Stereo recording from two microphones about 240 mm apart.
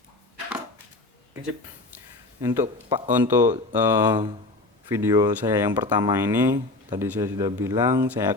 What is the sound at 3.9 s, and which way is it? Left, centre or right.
Speech, centre.